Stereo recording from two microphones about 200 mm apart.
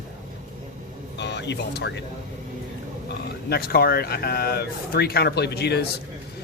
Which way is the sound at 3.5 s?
50° left (ahead or behind).